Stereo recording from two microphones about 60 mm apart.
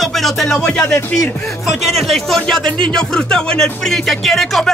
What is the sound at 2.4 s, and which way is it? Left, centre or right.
Speech, centre.